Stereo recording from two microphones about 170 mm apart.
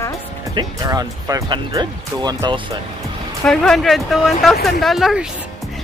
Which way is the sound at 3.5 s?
Centre (ahead or behind).